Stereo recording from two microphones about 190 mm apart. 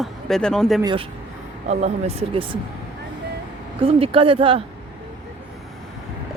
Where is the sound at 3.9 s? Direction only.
30° right (ahead or behind).